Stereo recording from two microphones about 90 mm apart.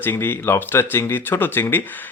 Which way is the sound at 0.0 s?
25° left (ahead or behind).